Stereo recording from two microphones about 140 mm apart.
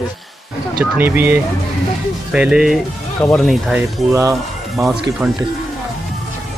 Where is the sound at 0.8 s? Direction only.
15° right (ahead or behind).